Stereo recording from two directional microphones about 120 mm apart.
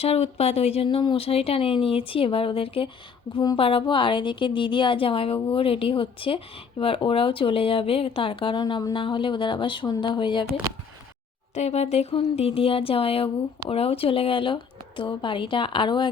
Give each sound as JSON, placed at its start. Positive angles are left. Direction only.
{"t": 0.0, "sound": "a woman's voice", "side_deg": 60}
{"t": 11.5, "sound": "a woman's voice", "side_deg": 65}